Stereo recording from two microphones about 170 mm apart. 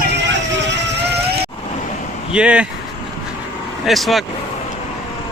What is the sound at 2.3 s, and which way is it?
Speech, 5° right (ahead or behind).